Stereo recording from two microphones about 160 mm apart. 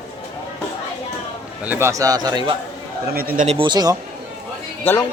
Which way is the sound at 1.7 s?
15° right (ahead or behind).